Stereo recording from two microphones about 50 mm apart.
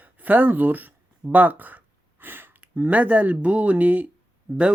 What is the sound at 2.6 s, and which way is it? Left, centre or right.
Speech, right.